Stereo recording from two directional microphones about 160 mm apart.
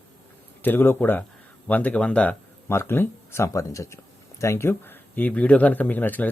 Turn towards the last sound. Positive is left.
turn(degrees=10)  # may be behind; listen again after turning